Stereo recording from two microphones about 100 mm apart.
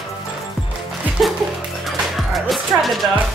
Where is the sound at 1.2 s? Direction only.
Centre (ahead or behind).